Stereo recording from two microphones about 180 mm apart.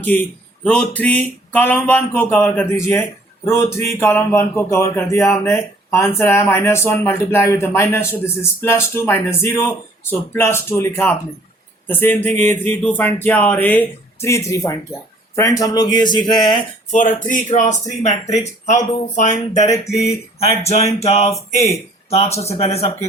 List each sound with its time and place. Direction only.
0.0 s a man's voice: 10° left (ahead or behind)
16.9 s speech: 45° left (ahead or behind)
19.6 s a man's voice: 20° left (ahead or behind)
20.6 s speech: 35° left (ahead or behind)